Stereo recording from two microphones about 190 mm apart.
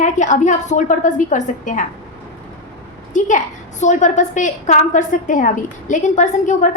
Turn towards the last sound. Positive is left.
turn(degrees=40)  # may be behind; listen again after turning